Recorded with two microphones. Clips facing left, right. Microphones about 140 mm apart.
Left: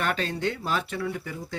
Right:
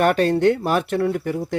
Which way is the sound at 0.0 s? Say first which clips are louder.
Right 11 dB; 55° right (ahead or behind).